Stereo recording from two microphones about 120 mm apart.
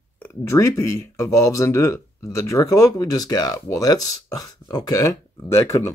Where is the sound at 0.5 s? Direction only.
25° left (ahead or behind).